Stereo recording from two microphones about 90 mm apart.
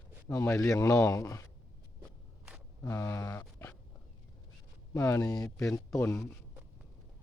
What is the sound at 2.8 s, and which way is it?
Speech, 35° left (ahead or behind).